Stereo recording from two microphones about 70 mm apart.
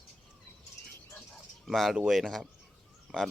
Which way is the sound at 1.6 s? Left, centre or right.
Centre.